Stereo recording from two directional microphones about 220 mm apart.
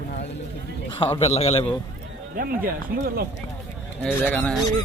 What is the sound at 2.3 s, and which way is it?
Speech, 40° right (ahead or behind).